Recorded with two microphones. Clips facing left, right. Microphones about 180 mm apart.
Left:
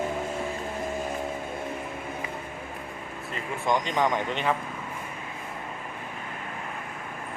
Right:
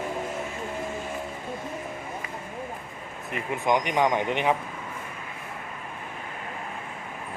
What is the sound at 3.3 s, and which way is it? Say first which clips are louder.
Speech: right 2 dB; 15° right (ahead or behind).